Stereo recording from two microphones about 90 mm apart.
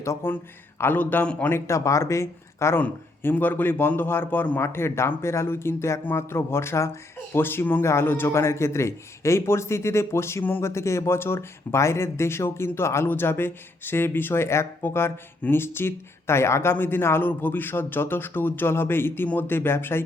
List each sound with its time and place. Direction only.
0.0 s a man's voice: 30° left (ahead or behind)
2.8 s a man's voice: 20° left (ahead or behind)